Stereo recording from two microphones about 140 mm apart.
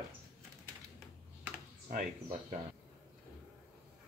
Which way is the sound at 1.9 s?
65° right (ahead or behind).